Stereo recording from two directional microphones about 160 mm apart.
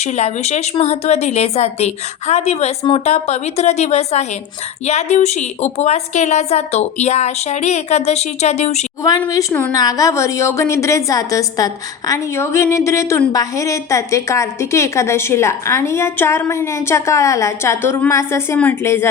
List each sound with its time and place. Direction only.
0.0 s a woman's voice: 45° left (ahead or behind)
9.0 s a woman's voice: 20° left (ahead or behind)